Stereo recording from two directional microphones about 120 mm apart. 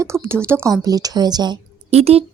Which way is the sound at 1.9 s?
55° right (ahead or behind).